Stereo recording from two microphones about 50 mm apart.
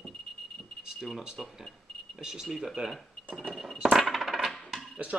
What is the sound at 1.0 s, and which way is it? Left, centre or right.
Speech, centre.